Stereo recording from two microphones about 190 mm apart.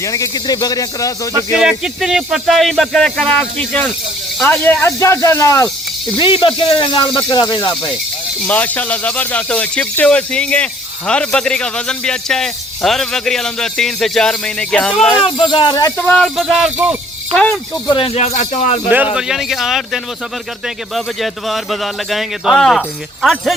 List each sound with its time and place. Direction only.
0.0 s speech: 15° left (ahead or behind)
1.5 s speech: centre (ahead or behind); by 5.6 s 15° left (ahead or behind)
6.1 s speech: 25° left (ahead or behind)
8.4 s speech: 10° left (ahead or behind)
15.2 s speech: 25° left (ahead or behind)
15.7 s speech: 10° left (ahead or behind); by 17.0 s 10° right (ahead or behind)
17.3 s speech: 10° left (ahead or behind)
17.8 s speech: 25° left (ahead or behind)
19.1 s speech: centre (ahead or behind)